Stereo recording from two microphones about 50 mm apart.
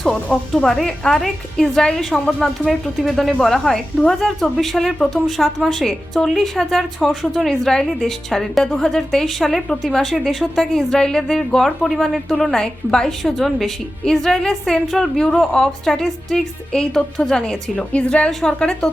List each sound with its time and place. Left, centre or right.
0.3 s a woman's voice: centre
2.6 s a woman's voice: centre
7.1 s speech: centre
7.4 s a woman's voice: centre
13.1 s a woman's voice: centre; by 18.3 s left
18.3 s speech: centre
18.6 s a woman's voice: centre